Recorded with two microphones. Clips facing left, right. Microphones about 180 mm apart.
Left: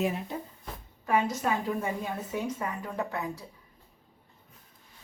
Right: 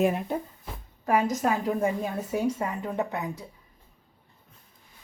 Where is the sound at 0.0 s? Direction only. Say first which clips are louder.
Right 6 dB; 50° right (ahead or behind).